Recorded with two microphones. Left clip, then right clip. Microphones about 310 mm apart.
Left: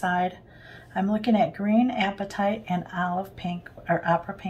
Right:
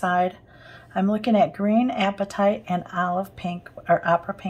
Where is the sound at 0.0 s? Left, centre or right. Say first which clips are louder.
Right 3 dB; centre.